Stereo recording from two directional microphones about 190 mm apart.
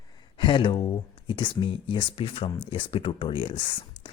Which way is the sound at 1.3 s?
25° left (ahead or behind).